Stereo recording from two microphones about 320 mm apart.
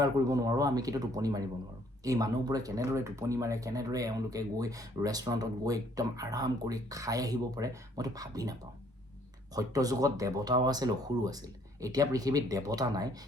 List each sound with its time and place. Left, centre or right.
0.0 s speech: centre